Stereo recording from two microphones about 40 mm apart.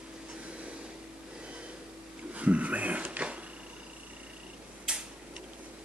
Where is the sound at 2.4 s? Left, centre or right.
Right.